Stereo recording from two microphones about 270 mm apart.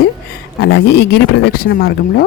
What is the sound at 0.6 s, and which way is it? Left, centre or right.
Speech, left.